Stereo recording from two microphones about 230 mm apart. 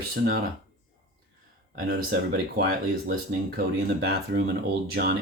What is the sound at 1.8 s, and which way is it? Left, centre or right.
Speech, right.